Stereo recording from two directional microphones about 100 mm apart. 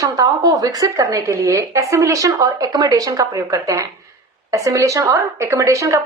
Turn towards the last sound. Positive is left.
turn(degrees=-30)  # may be behind; listen again after turning